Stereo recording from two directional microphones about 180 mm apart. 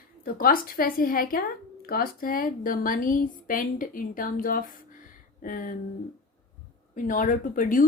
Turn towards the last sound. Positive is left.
turn(degrees=50)  # may be behind; listen again after turning